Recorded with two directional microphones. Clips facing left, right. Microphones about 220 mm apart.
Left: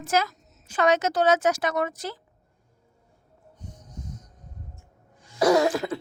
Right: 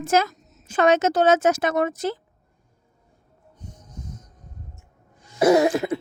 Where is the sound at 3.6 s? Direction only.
25° right (ahead or behind).